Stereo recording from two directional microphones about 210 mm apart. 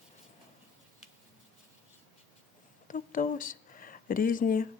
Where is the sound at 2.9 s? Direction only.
40° left (ahead or behind).